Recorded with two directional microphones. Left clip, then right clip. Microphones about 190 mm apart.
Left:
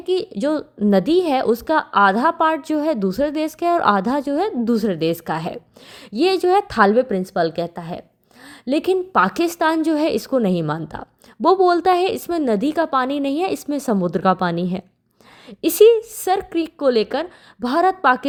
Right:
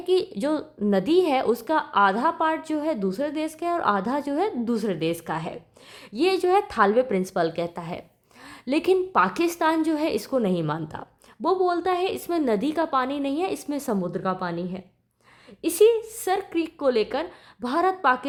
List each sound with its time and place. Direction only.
0.0 s a woman's voice: 15° left (ahead or behind)
11.4 s a woman's voice: 35° left (ahead or behind)